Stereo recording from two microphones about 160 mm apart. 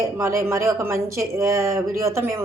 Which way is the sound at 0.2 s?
15° right (ahead or behind).